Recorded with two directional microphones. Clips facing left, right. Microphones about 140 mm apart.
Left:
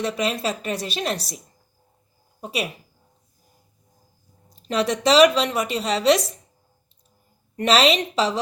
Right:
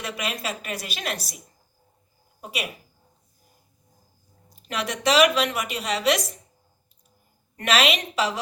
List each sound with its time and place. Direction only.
0.0 s a woman's voice: 35° left (ahead or behind)
2.4 s speech: 30° left (ahead or behind)
4.5 s a woman's voice: 30° left (ahead or behind)
7.5 s a woman's voice: 30° left (ahead or behind)